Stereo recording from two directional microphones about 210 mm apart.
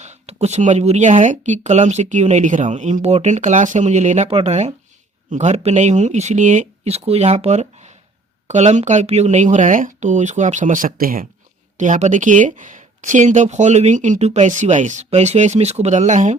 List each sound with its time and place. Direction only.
0.0 s speech: 30° right (ahead or behind)